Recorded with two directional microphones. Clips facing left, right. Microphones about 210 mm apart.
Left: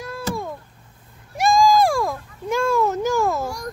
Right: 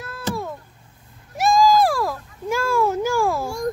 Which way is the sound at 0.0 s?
Centre (ahead or behind).